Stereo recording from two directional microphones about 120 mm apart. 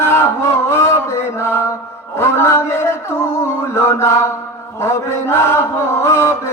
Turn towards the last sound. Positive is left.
turn(degrees=20)  # may be behind; listen again after turning